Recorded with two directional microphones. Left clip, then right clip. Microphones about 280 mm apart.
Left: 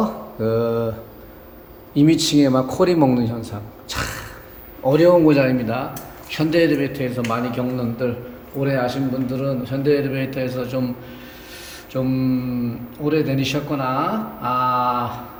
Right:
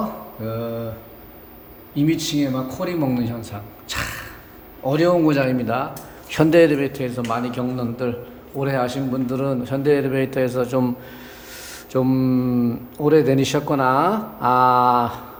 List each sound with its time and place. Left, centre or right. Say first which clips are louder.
0.0 s mantra: left 5 dB; centre
2.0 s a man's voice: left 5 dB; centre
11.9 s speech: right 2 dB; right